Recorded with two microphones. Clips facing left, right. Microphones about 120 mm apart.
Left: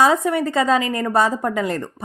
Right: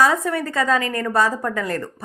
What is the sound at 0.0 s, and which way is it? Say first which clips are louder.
A woman's voice: left 2 dB; 20° left (ahead or behind).